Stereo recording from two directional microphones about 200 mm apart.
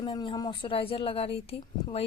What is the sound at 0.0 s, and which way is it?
Speech, 25° left (ahead or behind).